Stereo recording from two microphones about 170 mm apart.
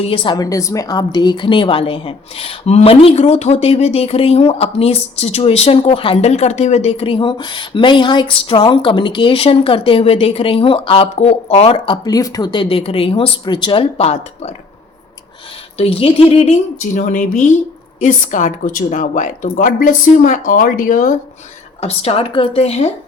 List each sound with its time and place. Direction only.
0.0 s a woman's voice: 30° left (ahead or behind)
15.8 s a woman's voice: 35° left (ahead or behind); by 21.2 s 50° left (ahead or behind)
21.8 s a woman's voice: 35° left (ahead or behind)